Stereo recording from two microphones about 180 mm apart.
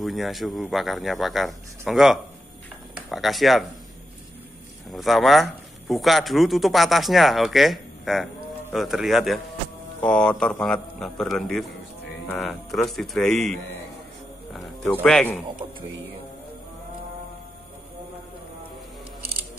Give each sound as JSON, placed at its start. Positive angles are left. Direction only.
{"t": 0.0, "sound": "speech", "side_deg": 0}
{"t": 4.9, "sound": "speech", "side_deg": 0}